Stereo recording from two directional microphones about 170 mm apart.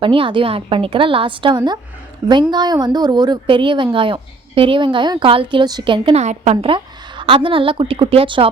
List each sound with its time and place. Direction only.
0.0 s a woman's voice: 30° right (ahead or behind)